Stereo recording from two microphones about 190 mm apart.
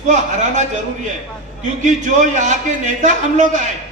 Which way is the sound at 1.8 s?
40° right (ahead or behind).